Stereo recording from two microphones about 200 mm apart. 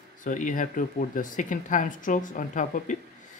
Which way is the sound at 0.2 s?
40° left (ahead or behind).